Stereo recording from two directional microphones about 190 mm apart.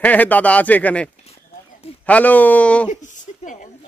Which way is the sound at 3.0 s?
40° left (ahead or behind).